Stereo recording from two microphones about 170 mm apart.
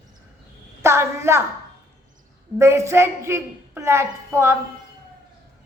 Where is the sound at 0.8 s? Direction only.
15° right (ahead or behind).